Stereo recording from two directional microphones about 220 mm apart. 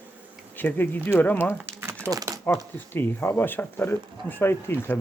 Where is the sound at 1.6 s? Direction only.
10° right (ahead or behind).